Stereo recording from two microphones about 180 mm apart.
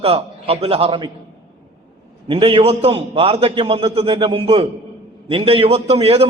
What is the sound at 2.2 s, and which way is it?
A man's voice, 30° right (ahead or behind).